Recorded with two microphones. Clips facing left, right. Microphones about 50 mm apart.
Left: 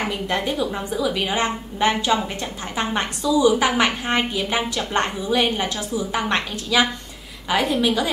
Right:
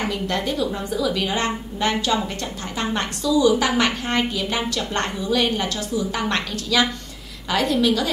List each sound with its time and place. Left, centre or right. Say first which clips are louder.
0.0 s a woman's voice: even; centre